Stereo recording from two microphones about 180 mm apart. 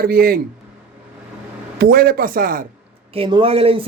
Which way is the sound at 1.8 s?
55° right (ahead or behind).